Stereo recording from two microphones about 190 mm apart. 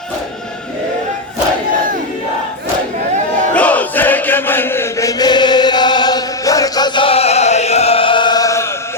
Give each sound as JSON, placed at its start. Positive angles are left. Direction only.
{"t": 3.5, "sound": "chant", "side_deg": 5}